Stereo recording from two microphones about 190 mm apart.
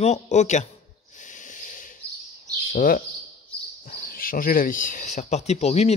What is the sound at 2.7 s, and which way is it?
Speech, 45° left (ahead or behind).